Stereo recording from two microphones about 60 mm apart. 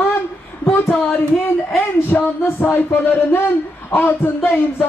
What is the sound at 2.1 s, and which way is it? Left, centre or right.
Speech, left.